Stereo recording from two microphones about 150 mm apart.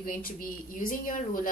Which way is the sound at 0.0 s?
70° left (ahead or behind).